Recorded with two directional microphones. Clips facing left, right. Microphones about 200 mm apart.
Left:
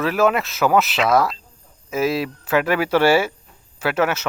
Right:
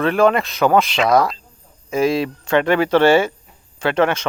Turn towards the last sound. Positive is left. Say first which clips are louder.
# right 3 dB
turn(degrees=5)  # may be behind; listen again after turning